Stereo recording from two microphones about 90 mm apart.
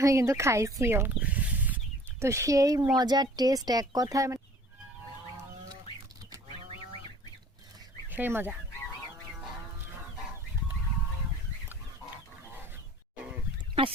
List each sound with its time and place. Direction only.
0.0 s speech: 35° right (ahead or behind)
1.2 s a sound: 15° right (ahead or behind)
2.1 s speech: 35° right (ahead or behind)
2.9 s speech: 50° right (ahead or behind)
8.1 s speech: 20° right (ahead or behind)